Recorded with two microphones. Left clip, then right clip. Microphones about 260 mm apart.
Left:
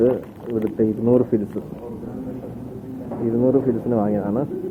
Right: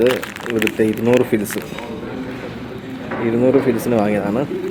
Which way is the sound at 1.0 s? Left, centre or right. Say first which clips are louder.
Right 3 dB; right.